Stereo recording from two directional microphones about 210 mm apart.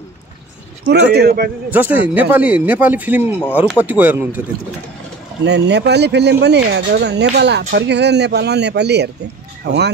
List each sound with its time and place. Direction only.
1.1 s speech: 50° right (ahead or behind)
1.7 s speech: 10° right (ahead or behind)
5.4 s speech: 55° right (ahead or behind)